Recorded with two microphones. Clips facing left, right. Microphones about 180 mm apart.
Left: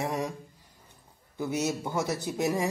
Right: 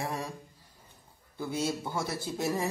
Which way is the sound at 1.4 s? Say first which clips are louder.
Left 3 dB; 20° left (ahead or behind).